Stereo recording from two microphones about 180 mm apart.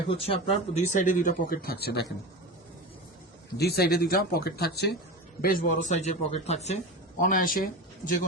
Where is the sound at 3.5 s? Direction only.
60° left (ahead or behind).